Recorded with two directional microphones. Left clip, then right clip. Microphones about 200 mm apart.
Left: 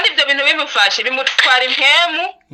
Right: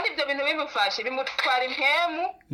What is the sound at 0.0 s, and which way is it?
A woman's voice, 30° left (ahead or behind).